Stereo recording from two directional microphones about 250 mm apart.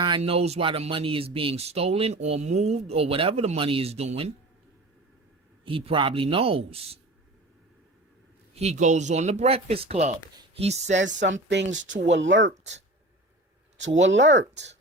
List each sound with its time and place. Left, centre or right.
0.0 s speech: right
5.6 s speech: right
8.5 s speech: right
10.9 s speech: right
13.8 s speech: right